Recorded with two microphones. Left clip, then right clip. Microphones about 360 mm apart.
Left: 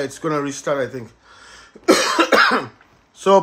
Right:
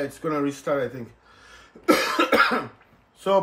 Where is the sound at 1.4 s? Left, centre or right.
Left.